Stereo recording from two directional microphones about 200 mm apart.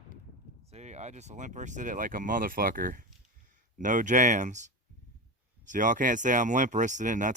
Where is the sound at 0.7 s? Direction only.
35° right (ahead or behind).